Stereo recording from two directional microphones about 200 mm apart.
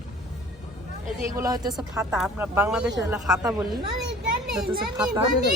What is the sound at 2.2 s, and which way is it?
Speech, 10° right (ahead or behind).